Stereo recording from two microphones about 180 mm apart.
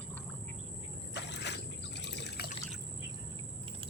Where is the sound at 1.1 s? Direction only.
75° left (ahead or behind).